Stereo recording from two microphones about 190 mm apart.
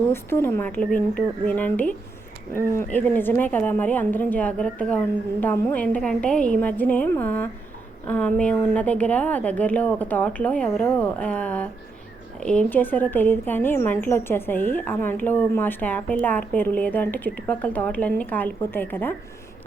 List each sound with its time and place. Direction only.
0.1 s a woman's voice: 10° left (ahead or behind)